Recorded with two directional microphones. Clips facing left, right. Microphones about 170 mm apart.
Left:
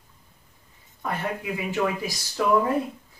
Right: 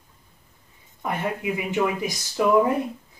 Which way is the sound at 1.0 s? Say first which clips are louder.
Right 3 dB; 20° right (ahead or behind).